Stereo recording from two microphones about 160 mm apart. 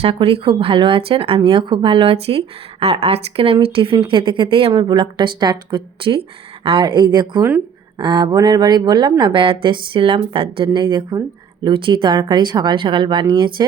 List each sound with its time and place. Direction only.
0.0 s speech: 35° right (ahead or behind)